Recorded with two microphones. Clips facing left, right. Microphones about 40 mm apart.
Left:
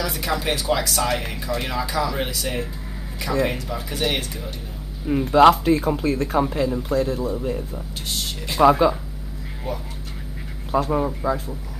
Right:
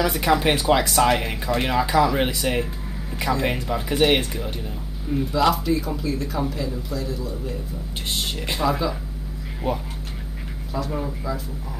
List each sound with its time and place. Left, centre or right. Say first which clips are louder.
0.0 s speech: right 5 dB; right
5.2 s speech: left 7 dB; left
8.1 s speech: right 2 dB; right
8.5 s speech: left 9 dB; left
10.7 s speech: left 7 dB; left